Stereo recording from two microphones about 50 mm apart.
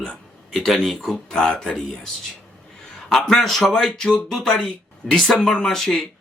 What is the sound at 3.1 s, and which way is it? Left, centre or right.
Speech, centre.